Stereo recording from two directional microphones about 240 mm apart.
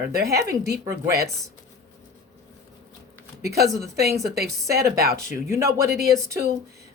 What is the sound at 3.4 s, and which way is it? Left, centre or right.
Speech, right.